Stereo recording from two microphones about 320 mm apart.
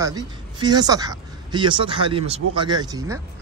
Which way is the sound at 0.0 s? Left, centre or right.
Centre.